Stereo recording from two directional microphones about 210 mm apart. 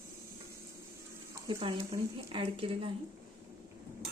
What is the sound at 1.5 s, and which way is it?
Speech, 25° right (ahead or behind).